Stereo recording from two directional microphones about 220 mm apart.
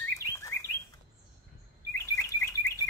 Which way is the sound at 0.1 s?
15° left (ahead or behind).